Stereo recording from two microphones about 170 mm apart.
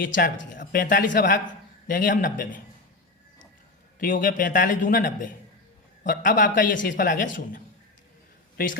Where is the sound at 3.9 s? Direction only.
55° left (ahead or behind).